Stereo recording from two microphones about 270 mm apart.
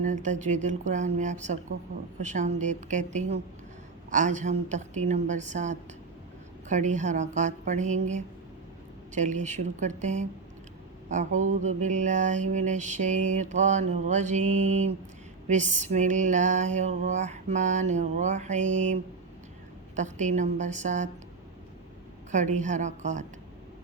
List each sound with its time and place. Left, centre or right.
0.0 s mantra: right
20.0 s mantra: right
22.3 s mantra: right